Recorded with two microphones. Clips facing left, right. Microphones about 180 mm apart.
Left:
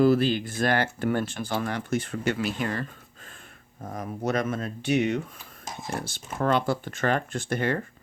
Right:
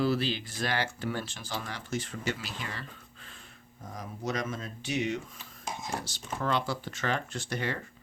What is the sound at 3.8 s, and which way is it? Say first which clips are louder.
Speech: left 6 dB; 55° left (ahead or behind).